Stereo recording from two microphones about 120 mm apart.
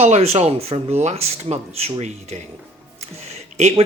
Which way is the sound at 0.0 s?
60° right (ahead or behind).